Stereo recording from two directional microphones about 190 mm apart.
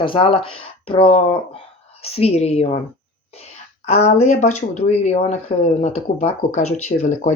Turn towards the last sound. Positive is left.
turn(degrees=35)  # may be behind; listen again after turning